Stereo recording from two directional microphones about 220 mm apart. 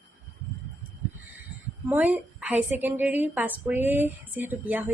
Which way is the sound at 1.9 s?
5° right (ahead or behind).